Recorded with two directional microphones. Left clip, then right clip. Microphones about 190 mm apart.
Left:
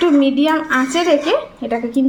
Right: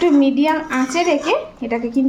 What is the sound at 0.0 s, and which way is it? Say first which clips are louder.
A woman's voice: left 1 dB; 20° right (ahead or behind).